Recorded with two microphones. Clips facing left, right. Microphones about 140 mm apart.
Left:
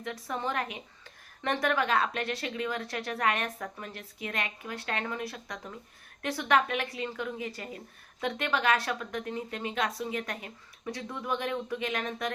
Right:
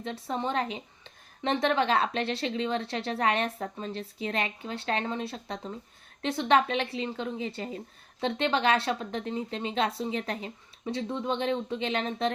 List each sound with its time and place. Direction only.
0.0 s a woman's voice: 25° right (ahead or behind)